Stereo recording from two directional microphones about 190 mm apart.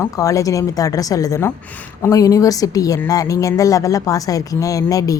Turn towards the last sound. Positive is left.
turn(degrees=20)  # may be behind; listen again after turning